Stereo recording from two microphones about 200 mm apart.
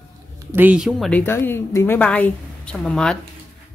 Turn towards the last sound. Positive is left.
turn(degrees=5)  # may be behind; listen again after turning